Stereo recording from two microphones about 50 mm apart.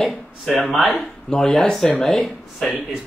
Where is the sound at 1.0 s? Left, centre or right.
Centre.